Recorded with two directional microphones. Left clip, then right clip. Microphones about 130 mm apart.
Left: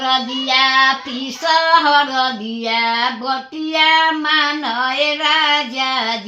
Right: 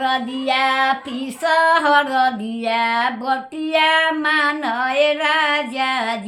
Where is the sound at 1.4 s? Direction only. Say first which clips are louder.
Left 2 dB; 35° right (ahead or behind).